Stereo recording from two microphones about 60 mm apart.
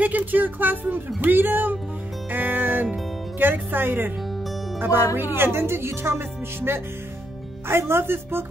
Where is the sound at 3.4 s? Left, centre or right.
Right.